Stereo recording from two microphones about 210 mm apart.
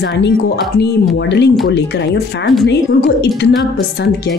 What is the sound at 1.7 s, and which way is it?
Speech, 50° left (ahead or behind).